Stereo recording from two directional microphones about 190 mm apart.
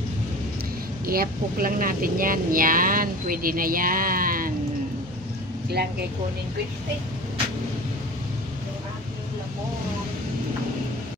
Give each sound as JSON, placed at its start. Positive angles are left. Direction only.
{"t": 1.0, "sound": "speech", "side_deg": -50}